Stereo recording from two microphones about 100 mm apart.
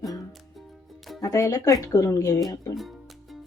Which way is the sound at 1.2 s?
35° left (ahead or behind).